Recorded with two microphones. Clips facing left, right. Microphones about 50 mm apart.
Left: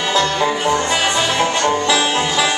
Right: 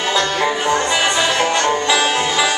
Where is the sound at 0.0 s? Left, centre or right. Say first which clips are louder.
Left 1 dB; centre.